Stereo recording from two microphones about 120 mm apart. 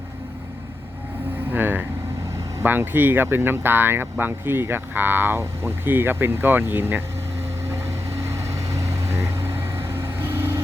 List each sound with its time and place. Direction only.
1.5 s vehicle: 15° right (ahead or behind)
2.6 s speech: 15° right (ahead or behind)
8.1 s vehicle: 25° right (ahead or behind)